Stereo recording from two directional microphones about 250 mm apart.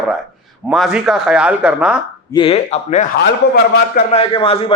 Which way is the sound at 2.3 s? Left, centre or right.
Left.